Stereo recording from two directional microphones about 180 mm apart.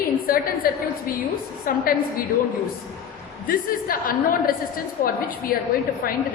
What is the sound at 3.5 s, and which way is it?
A woman's voice, 50° left (ahead or behind).